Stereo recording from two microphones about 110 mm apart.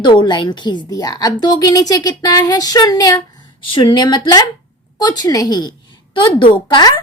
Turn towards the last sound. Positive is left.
turn(degrees=40)  # may be behind; listen again after turning